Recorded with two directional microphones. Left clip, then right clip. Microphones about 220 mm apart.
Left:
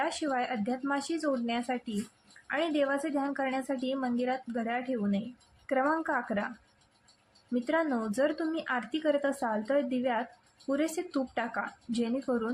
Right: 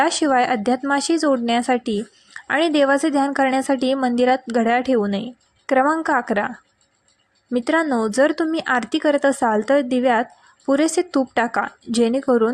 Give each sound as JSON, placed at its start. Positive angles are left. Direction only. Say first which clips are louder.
{"t": 0.0, "sound": "a woman's voice", "louder": "right 14 dB", "side_deg": -35}
{"t": 7.5, "sound": "a woman's voice", "louder": "right 11 dB", "side_deg": -35}